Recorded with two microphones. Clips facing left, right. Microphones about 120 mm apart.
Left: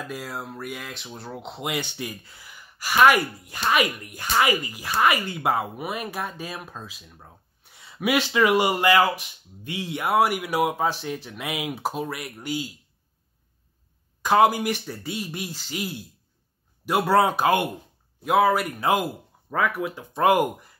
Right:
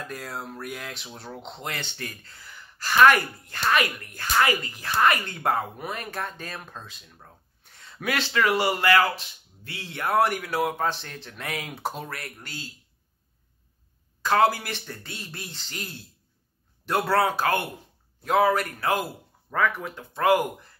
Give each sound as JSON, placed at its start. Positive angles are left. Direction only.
{"t": 0.0, "sound": "speech", "side_deg": 5}
{"t": 14.2, "sound": "speech", "side_deg": 15}
{"t": 18.2, "sound": "speech", "side_deg": 5}
{"t": 18.8, "sound": "speech", "side_deg": 15}
{"t": 19.5, "sound": "speech", "side_deg": 5}
{"t": 20.1, "sound": "speech", "side_deg": 15}